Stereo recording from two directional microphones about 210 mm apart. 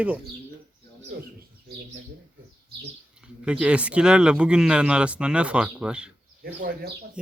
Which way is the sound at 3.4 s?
5° right (ahead or behind).